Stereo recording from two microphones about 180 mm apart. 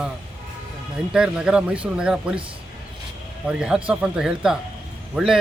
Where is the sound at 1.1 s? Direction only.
5° right (ahead or behind).